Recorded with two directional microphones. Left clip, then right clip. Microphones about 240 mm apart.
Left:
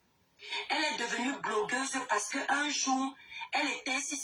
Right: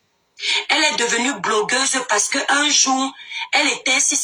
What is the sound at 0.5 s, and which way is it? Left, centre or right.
Speech, right.